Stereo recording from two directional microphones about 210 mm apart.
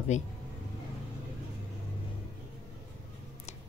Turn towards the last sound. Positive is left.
turn(degrees=30)  # may be behind; listen again after turning